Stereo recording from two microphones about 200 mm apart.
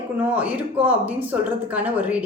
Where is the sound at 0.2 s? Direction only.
5° right (ahead or behind).